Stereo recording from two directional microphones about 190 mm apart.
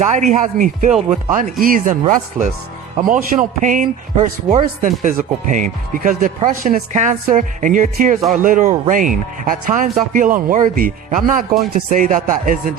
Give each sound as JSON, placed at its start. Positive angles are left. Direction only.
{"t": 0.0, "sound": "speech", "side_deg": -40}